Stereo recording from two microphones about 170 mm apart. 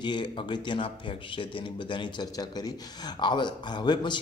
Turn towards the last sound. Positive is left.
turn(degrees=25)  # may be behind; listen again after turning